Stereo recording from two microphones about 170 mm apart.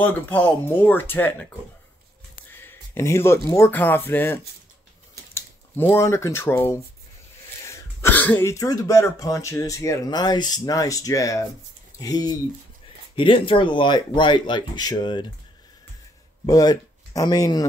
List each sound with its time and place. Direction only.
0.0 s speech: 10° left (ahead or behind)
2.5 s a sound: 15° left (ahead or behind)
3.4 s speech: 15° left (ahead or behind)
16.4 s speech: 20° left (ahead or behind)